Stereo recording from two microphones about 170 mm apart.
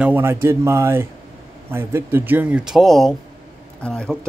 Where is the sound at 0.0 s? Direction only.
15° right (ahead or behind).